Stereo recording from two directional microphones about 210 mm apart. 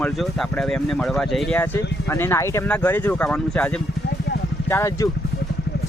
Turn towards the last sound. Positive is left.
turn(degrees=15)  # may be behind; listen again after turning